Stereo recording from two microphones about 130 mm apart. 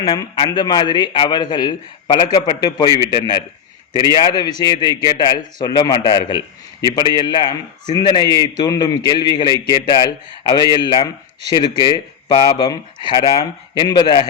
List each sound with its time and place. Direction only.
0.3 s a man's voice: 35° left (ahead or behind)